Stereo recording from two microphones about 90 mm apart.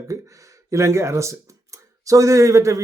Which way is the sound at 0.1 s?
40° right (ahead or behind).